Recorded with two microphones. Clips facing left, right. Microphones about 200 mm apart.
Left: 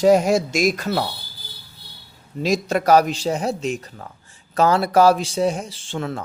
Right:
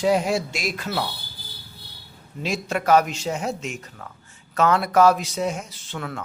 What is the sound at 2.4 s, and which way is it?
Speech, 40° left (ahead or behind).